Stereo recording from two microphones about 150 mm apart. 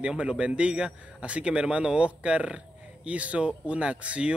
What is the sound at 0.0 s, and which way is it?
Speech, 5° right (ahead or behind).